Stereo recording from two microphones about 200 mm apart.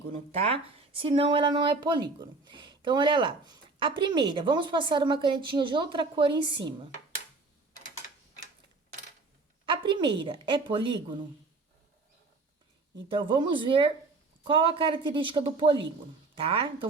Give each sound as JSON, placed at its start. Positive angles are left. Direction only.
{"t": 0.3, "sound": "speech", "side_deg": -30}
{"t": 9.6, "sound": "speech", "side_deg": -25}
{"t": 13.1, "sound": "speech", "side_deg": -25}